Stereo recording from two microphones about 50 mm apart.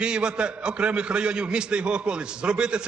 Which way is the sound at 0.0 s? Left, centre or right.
Centre.